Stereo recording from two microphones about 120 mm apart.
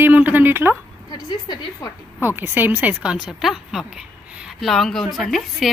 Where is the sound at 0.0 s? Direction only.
15° right (ahead or behind).